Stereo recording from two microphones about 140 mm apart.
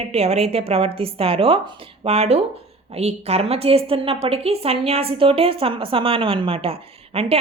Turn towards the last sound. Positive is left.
turn(degrees=-45)  # may be behind; listen again after turning